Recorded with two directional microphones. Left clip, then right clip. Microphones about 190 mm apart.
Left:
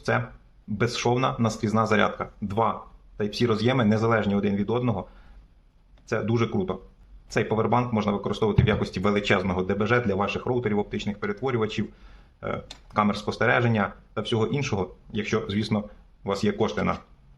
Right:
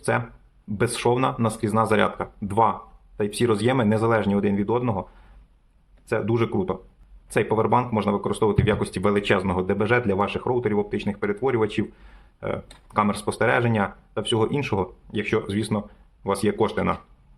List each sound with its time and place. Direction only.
0.1 s speech: 20° right (ahead or behind)
6.1 s speech: 20° right (ahead or behind)